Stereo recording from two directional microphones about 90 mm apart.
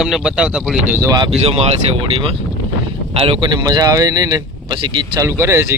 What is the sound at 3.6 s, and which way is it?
Speech, 45° right (ahead or behind).